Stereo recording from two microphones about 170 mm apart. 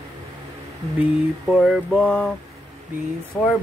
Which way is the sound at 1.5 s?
Centre (ahead or behind).